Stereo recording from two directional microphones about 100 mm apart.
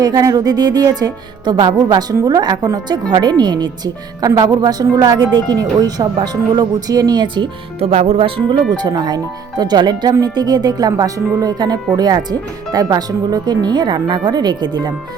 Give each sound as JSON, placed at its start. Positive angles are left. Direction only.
{"t": 0.0, "sound": "speech", "side_deg": -40}
{"t": 7.8, "sound": "speech", "side_deg": -85}
{"t": 8.7, "sound": "speech", "side_deg": -45}